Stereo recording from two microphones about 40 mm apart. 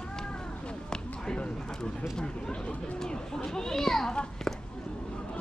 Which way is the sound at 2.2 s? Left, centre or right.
Left.